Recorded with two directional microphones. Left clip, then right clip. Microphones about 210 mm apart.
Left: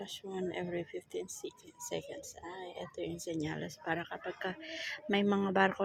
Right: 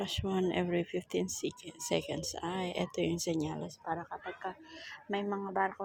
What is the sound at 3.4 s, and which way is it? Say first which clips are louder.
Speech: right 1 dB; 5° right (ahead or behind).